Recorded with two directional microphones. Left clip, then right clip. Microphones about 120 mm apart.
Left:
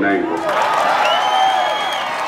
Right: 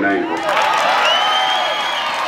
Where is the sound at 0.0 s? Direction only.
30° right (ahead or behind).